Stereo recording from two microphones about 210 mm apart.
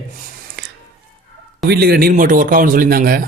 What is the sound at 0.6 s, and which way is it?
Music, 55° right (ahead or behind).